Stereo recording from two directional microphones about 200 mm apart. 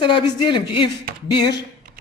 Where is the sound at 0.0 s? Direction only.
25° left (ahead or behind).